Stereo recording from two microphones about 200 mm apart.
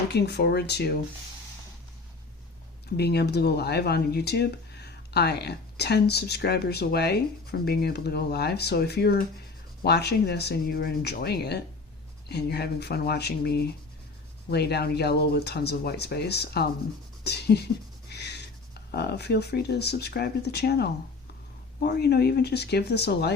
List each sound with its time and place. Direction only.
0.1 s speech: 55° left (ahead or behind)
3.0 s speech: 55° left (ahead or behind)